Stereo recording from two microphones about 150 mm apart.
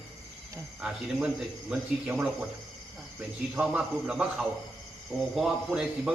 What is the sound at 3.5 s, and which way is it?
A man's voice, 10° right (ahead or behind).